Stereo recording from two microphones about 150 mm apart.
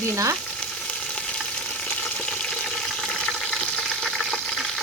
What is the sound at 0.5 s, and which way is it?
Frying, 5° left (ahead or behind).